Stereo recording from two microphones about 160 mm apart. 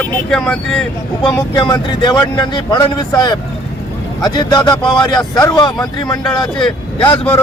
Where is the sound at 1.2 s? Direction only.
25° left (ahead or behind).